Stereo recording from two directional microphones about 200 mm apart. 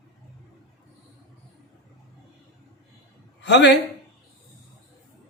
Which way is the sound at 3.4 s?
60° left (ahead or behind).